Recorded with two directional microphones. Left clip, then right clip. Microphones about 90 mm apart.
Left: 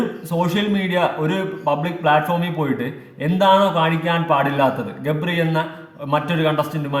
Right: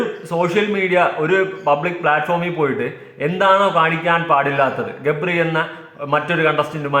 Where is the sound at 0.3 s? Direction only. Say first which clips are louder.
Right 4 dB; 20° left (ahead or behind).